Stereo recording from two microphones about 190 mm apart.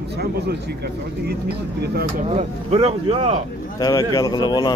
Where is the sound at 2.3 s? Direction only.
30° right (ahead or behind).